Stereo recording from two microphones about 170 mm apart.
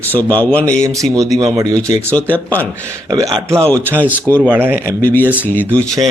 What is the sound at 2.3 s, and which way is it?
Speech, 10° left (ahead or behind).